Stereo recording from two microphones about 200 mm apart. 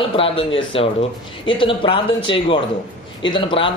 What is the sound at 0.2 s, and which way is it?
A man's voice, 25° left (ahead or behind).